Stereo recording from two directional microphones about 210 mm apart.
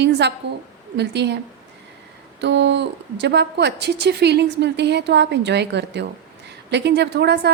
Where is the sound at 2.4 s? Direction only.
55° right (ahead or behind).